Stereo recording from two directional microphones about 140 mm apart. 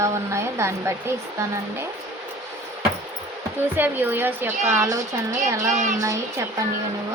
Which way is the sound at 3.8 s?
15° right (ahead or behind).